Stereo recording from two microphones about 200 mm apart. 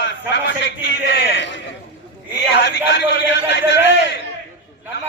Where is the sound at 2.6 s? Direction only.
65° left (ahead or behind).